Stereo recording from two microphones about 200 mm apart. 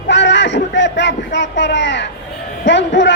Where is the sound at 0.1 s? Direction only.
60° left (ahead or behind).